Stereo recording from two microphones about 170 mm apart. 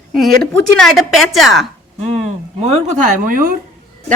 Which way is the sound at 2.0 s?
40° right (ahead or behind).